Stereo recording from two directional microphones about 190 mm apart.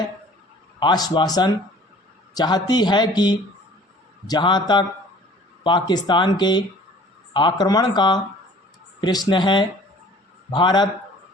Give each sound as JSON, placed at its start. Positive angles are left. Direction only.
{"t": 0.8, "sound": "a man's voice", "side_deg": 20}
{"t": 5.9, "sound": "a man's voice", "side_deg": 25}